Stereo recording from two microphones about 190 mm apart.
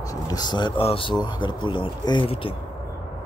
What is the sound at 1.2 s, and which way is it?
Speech, 25° left (ahead or behind).